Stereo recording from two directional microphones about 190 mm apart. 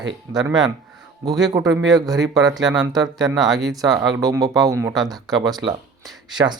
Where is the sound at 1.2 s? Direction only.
20° right (ahead or behind).